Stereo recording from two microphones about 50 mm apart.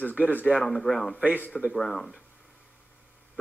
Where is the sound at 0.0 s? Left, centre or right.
Left.